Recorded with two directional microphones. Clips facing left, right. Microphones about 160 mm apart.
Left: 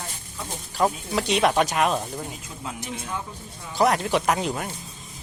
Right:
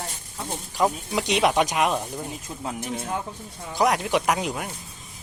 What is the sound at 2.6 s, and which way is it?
Speech, 35° right (ahead or behind).